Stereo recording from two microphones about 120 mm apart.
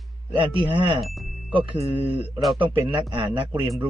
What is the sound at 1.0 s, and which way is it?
Speech, centre (ahead or behind).